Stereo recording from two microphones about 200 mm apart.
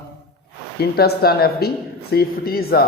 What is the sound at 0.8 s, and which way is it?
A man's voice, 50° left (ahead or behind).